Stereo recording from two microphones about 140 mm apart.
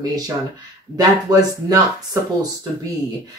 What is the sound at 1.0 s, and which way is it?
Speech, 25° right (ahead or behind).